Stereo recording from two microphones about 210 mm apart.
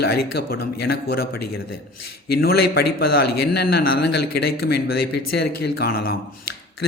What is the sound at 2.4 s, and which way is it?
Speech, 50° left (ahead or behind).